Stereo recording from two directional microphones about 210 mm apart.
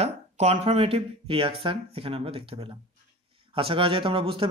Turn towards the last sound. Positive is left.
turn(degrees=-25)  # may be behind; listen again after turning